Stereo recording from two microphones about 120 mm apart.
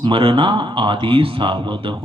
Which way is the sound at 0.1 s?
45° right (ahead or behind).